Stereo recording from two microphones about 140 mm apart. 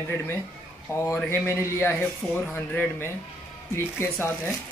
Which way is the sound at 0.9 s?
20° left (ahead or behind).